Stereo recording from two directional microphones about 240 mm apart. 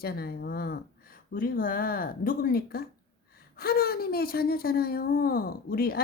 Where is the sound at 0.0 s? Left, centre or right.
Left.